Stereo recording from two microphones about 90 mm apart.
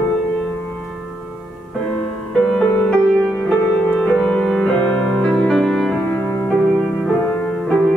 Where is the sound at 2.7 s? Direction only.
15° left (ahead or behind).